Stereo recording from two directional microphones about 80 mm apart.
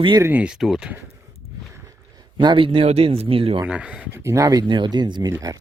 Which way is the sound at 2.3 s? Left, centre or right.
Right.